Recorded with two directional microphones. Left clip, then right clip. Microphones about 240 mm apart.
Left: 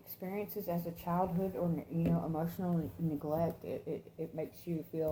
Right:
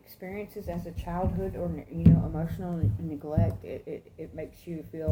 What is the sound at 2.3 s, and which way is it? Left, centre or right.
A woman's voice, centre.